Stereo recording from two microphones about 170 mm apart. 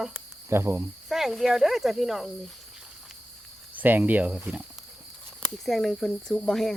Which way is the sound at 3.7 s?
10° right (ahead or behind).